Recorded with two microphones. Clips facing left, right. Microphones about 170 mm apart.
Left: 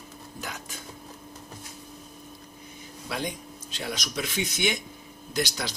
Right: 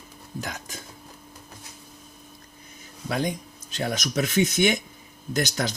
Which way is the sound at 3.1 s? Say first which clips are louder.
Right 6 dB; 45° right (ahead or behind).